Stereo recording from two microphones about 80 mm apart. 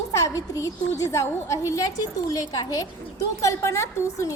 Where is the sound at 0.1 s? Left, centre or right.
Left.